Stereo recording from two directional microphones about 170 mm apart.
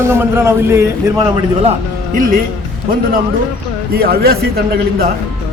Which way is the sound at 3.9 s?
65° right (ahead or behind).